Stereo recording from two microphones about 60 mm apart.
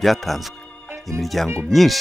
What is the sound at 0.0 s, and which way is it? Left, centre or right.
Speech, centre.